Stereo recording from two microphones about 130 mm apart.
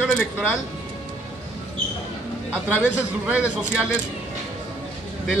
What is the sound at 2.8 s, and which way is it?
A man's voice, 10° right (ahead or behind).